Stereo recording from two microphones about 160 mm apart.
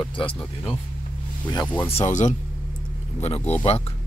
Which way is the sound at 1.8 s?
45° left (ahead or behind).